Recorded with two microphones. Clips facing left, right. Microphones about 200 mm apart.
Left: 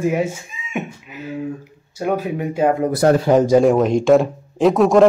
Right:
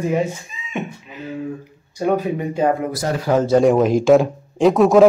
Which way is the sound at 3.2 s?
20° left (ahead or behind).